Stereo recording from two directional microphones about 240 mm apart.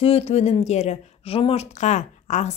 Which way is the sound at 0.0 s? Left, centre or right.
Left.